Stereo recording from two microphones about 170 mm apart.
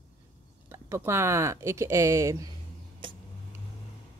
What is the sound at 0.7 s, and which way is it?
Speech, 15° right (ahead or behind).